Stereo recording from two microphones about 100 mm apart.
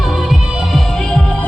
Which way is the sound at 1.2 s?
15° left (ahead or behind).